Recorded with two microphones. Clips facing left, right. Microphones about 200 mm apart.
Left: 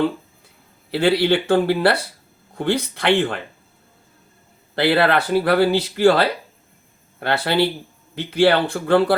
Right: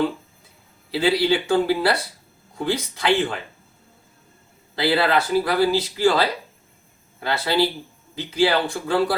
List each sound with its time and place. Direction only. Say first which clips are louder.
0.9 s speech: left 2 dB; 60° left (ahead or behind)
4.7 s speech: left 3 dB; 60° left (ahead or behind)